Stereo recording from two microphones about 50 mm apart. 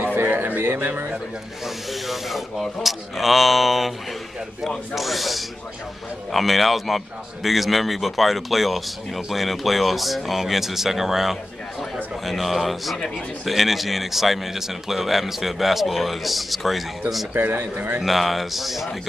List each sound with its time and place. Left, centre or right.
0.0 s speech: right
1.9 s speech: centre
12.9 s a man's voice: centre
13.5 s speech: centre
17.3 s a man's voice: right
18.0 s speech: centre